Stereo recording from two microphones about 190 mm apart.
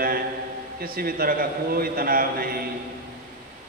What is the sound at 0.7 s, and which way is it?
A man's voice, 50° right (ahead or behind).